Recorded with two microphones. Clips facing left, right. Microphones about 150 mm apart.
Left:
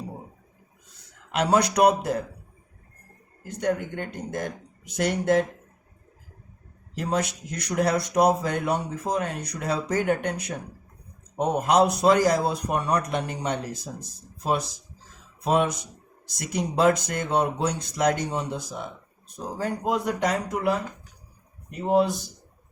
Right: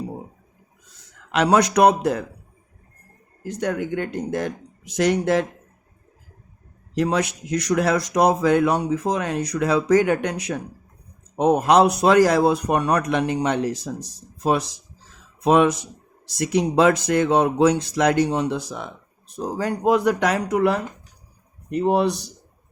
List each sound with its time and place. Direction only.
1.3 s speech: 85° right
3.4 s speech: 90° right
6.9 s speech: 80° right
16.4 s speech: 75° right (ahead or behind)